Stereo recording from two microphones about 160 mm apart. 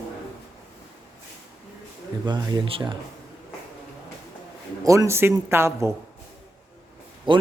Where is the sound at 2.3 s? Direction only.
25° right (ahead or behind).